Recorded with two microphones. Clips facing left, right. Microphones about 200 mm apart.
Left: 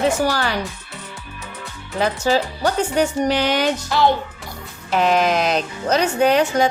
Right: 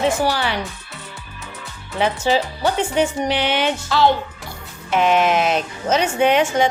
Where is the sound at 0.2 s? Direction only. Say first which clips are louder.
Even; 45° left (ahead or behind).